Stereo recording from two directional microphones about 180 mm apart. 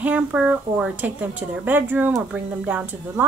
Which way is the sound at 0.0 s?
5° right (ahead or behind).